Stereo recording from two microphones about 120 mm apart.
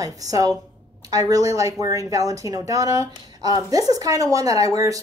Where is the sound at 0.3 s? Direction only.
30° right (ahead or behind).